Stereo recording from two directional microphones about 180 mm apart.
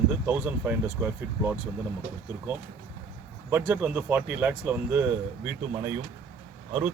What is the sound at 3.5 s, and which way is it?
Speech, 10° right (ahead or behind).